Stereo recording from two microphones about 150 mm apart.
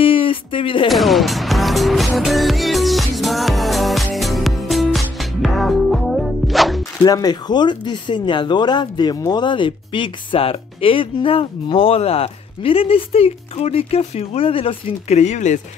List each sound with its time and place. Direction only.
0.0 s music: 35° left (ahead or behind)
0.8 s music: centre (ahead or behind)
7.1 s speech: 25° left (ahead or behind); by 15.6 s 50° left (ahead or behind)